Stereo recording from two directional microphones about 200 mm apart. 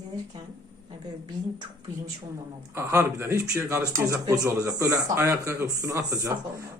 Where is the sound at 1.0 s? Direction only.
20° right (ahead or behind).